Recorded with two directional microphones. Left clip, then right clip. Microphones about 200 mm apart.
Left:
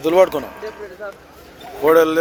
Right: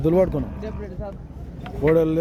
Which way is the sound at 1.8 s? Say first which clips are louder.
Left 6 dB; centre (ahead or behind).